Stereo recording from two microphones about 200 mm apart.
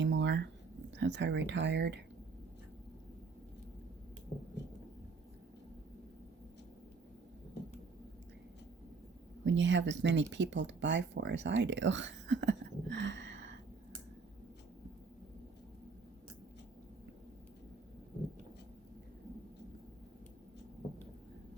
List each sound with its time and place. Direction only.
0.0 s a sound: 65° right (ahead or behind)
0.9 s speech: 65° right (ahead or behind)
9.4 s speech: 65° right (ahead or behind)